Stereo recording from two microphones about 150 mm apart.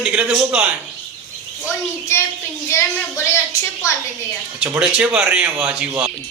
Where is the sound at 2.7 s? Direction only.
20° left (ahead or behind).